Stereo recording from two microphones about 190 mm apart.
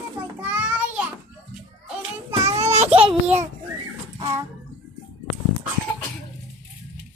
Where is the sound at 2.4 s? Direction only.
35° right (ahead or behind).